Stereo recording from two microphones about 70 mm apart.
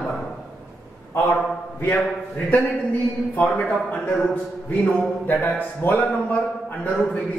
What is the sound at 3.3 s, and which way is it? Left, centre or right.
Speech, centre.